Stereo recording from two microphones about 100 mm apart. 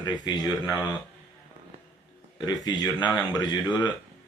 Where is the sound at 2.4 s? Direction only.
40° left (ahead or behind).